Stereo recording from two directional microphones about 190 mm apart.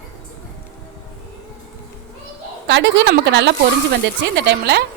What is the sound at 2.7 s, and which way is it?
A woman's voice, 70° right (ahead or behind).